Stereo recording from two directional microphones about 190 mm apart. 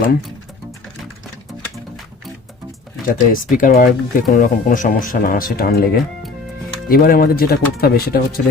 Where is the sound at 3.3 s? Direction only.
45° left (ahead or behind).